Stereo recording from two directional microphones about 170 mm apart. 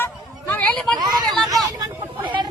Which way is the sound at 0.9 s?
25° right (ahead or behind).